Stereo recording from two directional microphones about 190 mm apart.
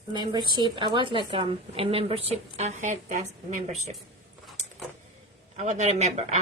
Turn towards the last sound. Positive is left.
turn(degrees=-35)  # may be behind; listen again after turning